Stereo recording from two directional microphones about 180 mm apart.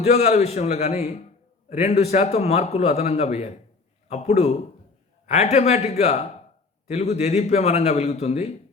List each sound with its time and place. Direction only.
0.0 s a man's voice: 35° left (ahead or behind)